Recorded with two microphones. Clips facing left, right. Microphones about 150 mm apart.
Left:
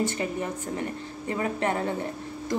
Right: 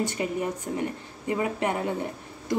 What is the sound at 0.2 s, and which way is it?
A woman's voice, 15° right (ahead or behind).